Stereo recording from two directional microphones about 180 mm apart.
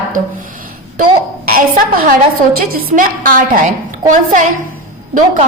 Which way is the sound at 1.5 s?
55° right (ahead or behind).